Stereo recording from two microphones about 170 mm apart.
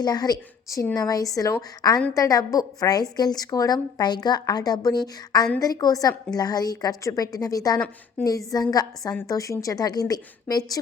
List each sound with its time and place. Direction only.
0.0 s a woman's voice: 25° left (ahead or behind)